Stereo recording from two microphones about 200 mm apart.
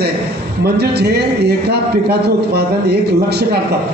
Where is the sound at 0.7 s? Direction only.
55° right (ahead or behind).